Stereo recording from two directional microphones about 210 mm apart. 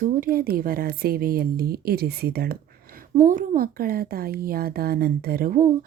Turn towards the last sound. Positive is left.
turn(degrees=-40)  # may be behind; listen again after turning